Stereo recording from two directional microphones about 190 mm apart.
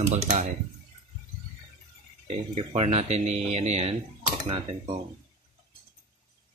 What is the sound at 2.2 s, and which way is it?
A man's voice, 35° right (ahead or behind).